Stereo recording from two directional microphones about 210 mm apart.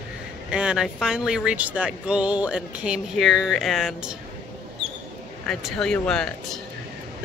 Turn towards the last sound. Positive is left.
turn(degrees=5)  # may be behind; listen again after turning